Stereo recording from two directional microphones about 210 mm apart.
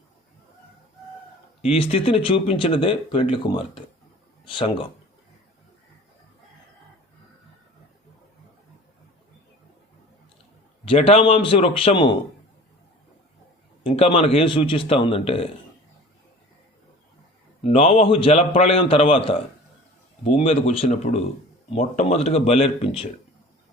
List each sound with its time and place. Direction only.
1.6 s speech: 25° left (ahead or behind)
10.8 s speech: 25° left (ahead or behind)
13.8 s speech: 25° left (ahead or behind)
17.6 s speech: 30° left (ahead or behind)